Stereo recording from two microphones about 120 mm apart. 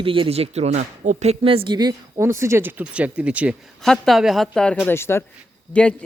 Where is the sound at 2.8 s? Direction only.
10° right (ahead or behind).